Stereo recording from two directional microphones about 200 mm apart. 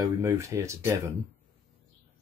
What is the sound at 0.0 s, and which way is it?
Speech, 15° right (ahead or behind).